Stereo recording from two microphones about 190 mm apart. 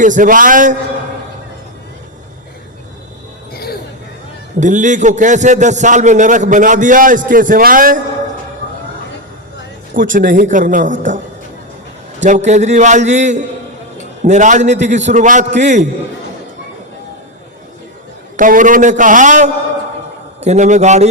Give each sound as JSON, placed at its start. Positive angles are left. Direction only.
{"t": 0.0, "sound": "a man's voice", "side_deg": -45}
{"t": 3.5, "sound": "a sound", "side_deg": 55}
{"t": 4.6, "sound": "a man's voice", "side_deg": -40}
{"t": 9.9, "sound": "a man's voice", "side_deg": -45}
{"t": 12.2, "sound": "a man's voice", "side_deg": -40}
{"t": 18.3, "sound": "a man's voice", "side_deg": -45}